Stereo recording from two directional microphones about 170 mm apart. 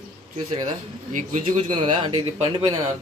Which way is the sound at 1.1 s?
40° right (ahead or behind).